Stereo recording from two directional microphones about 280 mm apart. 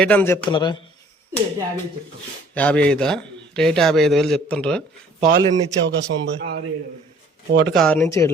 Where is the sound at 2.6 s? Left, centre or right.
Centre.